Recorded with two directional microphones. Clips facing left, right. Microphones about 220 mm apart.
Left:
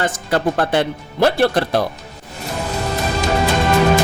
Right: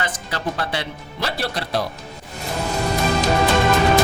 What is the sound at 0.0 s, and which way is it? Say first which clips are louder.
Speech: left 8 dB; 50° left (ahead or behind).